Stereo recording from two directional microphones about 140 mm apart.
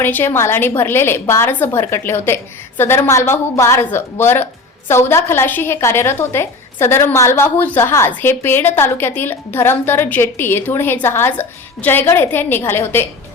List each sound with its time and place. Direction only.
0.0 s a woman's voice: 15° left (ahead or behind)